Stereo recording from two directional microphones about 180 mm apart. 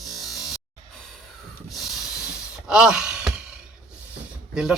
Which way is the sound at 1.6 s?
Centre (ahead or behind).